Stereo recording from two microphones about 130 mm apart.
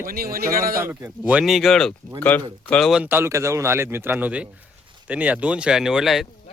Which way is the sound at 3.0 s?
20° right (ahead or behind).